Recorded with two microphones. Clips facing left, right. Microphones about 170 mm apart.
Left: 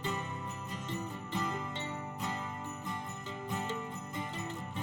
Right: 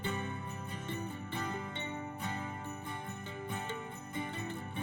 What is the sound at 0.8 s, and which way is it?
Music, 55° right (ahead or behind).